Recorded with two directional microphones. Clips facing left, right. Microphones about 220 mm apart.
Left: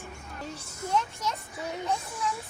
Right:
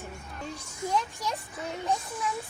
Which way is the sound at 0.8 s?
15° right (ahead or behind).